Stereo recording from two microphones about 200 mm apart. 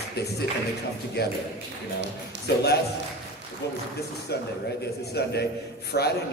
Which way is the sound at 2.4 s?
55° left (ahead or behind).